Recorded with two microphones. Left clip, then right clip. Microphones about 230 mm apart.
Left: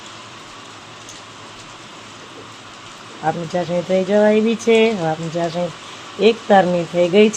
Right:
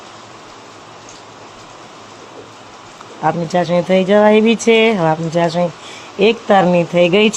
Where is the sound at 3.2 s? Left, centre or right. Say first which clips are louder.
Right 5 dB; centre.